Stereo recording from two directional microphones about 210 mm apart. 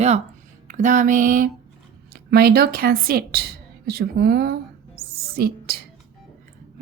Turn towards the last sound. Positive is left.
turn(degrees=-45)  # may be behind; listen again after turning